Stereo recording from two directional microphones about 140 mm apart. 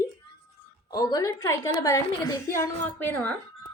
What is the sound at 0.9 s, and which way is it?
A woman's voice, 25° left (ahead or behind).